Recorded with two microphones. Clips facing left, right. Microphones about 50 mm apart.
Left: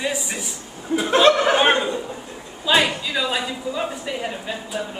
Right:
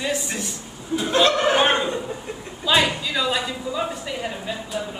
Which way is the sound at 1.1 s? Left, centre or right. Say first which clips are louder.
Left 4 dB; left.